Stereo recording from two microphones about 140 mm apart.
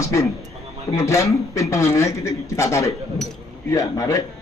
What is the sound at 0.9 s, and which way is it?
Speech, 20° left (ahead or behind).